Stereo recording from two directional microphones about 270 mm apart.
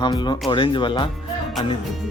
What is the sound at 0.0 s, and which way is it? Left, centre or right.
Speech, centre.